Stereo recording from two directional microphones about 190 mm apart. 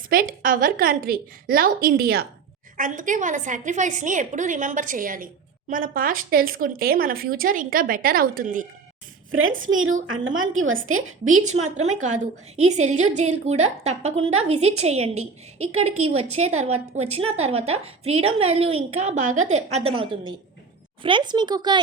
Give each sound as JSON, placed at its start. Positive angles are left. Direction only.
{"t": 0.1, "sound": "a woman's voice", "side_deg": -50}
{"t": 2.7, "sound": "a woman's voice", "side_deg": -45}
{"t": 9.3, "sound": "a woman's voice", "side_deg": -90}
{"t": 11.5, "sound": "a woman's voice", "side_deg": -35}